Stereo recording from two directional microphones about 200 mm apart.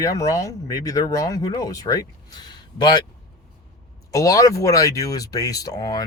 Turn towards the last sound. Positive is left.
turn(degrees=20)  # may be behind; listen again after turning